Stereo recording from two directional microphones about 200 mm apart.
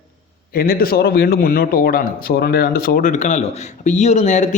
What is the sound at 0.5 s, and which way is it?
A man's voice, 50° left (ahead or behind).